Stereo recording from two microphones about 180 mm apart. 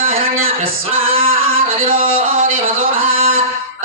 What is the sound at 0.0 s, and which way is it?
Music, 35° right (ahead or behind).